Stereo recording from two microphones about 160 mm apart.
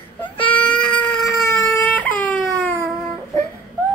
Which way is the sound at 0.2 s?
10° left (ahead or behind).